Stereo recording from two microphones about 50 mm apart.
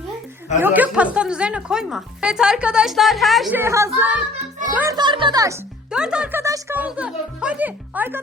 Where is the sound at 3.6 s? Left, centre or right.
Right.